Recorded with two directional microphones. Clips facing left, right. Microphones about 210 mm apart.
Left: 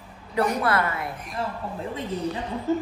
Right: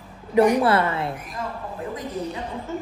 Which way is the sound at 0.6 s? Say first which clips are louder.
Right 4 dB; 30° right (ahead or behind).